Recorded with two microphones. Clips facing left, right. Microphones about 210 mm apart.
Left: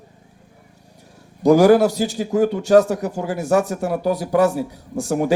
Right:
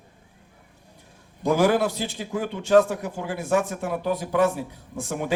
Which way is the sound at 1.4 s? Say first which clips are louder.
Left 8 dB; 40° left (ahead or behind).